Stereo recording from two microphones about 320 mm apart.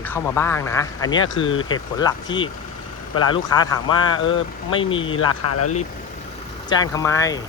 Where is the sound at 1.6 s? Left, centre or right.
Centre.